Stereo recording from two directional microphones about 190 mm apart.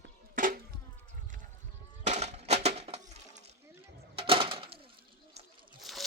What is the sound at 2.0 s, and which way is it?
Music, 35° right (ahead or behind).